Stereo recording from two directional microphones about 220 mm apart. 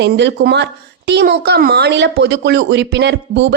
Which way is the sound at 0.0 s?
55° right (ahead or behind).